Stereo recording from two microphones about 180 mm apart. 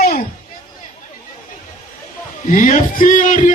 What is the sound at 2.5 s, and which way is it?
A man's voice, 45° left (ahead or behind).